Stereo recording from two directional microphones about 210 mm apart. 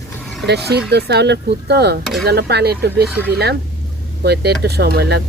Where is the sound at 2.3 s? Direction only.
50° right (ahead or behind).